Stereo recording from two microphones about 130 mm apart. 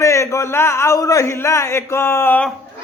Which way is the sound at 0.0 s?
25° left (ahead or behind).